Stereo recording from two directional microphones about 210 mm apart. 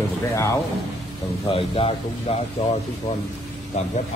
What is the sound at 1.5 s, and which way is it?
Speech, 25° left (ahead or behind).